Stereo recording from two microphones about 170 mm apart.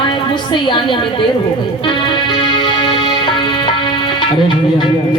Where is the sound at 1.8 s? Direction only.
30° left (ahead or behind).